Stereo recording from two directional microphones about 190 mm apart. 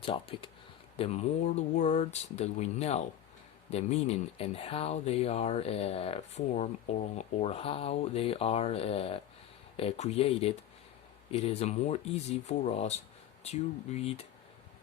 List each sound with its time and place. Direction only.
0.0 s speech: 30° left (ahead or behind)